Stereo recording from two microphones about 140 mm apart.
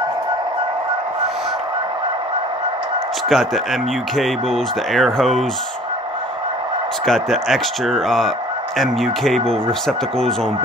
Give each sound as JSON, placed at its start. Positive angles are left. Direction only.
{"t": 3.3, "sound": "speech", "side_deg": 0}
{"t": 7.1, "sound": "speech", "side_deg": 0}